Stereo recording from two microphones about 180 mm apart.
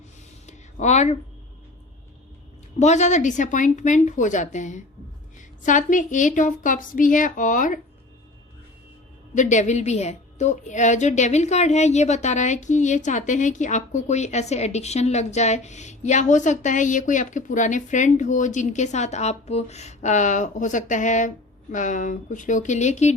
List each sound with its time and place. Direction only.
0.4 s a sound: 40° left (ahead or behind)
2.7 s a woman's voice: 40° left (ahead or behind)
9.3 s a woman's voice: 40° left (ahead or behind)